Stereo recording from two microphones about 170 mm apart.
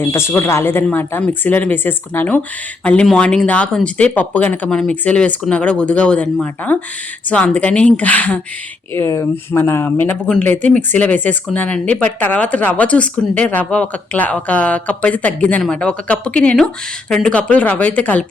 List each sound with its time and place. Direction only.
0.0 s speech: 15° left (ahead or behind)